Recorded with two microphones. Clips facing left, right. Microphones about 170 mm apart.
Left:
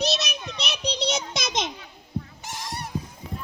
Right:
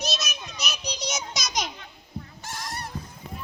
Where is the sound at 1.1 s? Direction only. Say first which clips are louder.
Left 4 dB; 55° left (ahead or behind).